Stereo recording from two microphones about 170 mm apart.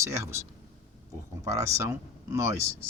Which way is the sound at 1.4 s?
20° right (ahead or behind).